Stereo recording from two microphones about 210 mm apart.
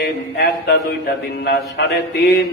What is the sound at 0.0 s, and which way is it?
Speech, 50° left (ahead or behind).